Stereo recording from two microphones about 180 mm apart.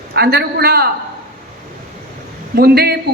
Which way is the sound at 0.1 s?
65° right (ahead or behind).